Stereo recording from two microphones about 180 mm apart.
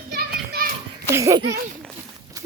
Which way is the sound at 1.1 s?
15° right (ahead or behind).